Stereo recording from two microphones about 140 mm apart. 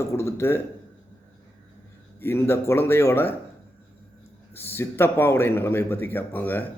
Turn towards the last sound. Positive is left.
turn(degrees=15)  # may be behind; listen again after turning